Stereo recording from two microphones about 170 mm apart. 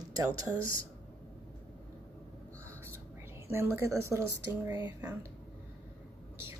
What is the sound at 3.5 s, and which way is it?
A woman's voice, 15° right (ahead or behind).